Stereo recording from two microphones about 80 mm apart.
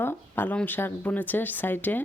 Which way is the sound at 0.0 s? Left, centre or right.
Left.